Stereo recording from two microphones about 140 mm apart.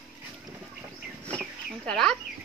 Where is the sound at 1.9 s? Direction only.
5° left (ahead or behind).